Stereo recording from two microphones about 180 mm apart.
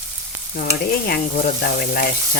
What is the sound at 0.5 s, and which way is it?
Stir, 55° left (ahead or behind).